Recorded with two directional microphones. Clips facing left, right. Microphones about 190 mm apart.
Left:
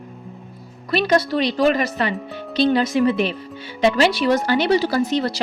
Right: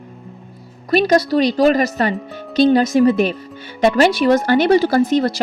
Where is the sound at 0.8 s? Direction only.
40° right (ahead or behind).